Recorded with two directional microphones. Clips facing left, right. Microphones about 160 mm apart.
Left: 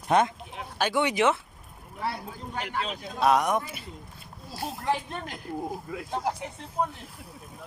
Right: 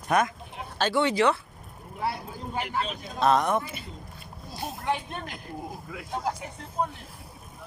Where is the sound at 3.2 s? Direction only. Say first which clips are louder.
Even; 10° left (ahead or behind).